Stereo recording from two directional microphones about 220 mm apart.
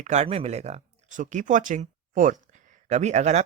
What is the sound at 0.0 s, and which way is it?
Speech, 30° right (ahead or behind).